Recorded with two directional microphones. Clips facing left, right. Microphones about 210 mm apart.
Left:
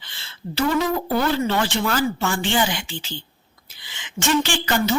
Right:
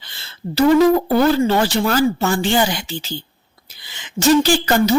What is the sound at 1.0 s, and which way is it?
A woman's voice, 40° right (ahead or behind).